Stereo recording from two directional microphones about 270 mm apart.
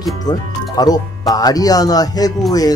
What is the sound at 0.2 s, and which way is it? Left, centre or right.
Speech, centre.